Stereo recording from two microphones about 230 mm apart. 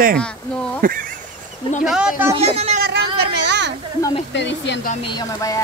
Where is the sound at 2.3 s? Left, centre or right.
Right.